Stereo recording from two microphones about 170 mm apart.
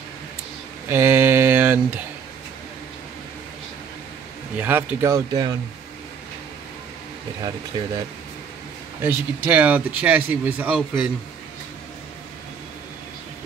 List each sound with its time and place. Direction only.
0.8 s mantra: 15° right (ahead or behind)
4.6 s speech: 10° right (ahead or behind)
7.4 s speech: 25° right (ahead or behind)
9.0 s speech: 10° right (ahead or behind)